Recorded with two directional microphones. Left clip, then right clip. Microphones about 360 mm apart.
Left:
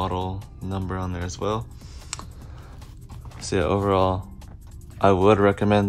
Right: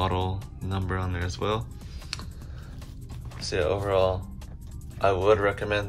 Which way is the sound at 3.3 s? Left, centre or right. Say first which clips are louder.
Left 3 dB; centre.